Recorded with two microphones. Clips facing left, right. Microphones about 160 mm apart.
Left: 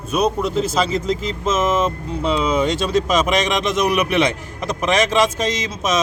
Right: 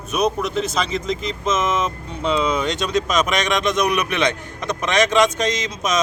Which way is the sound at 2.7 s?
5° left (ahead or behind).